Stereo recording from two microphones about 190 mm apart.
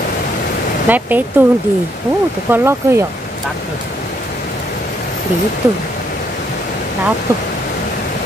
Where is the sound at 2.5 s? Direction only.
15° right (ahead or behind).